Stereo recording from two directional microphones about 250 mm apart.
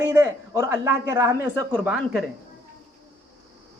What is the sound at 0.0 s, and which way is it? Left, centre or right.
A man's voice, centre.